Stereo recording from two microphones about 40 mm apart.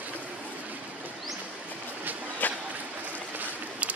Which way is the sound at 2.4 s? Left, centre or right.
Left.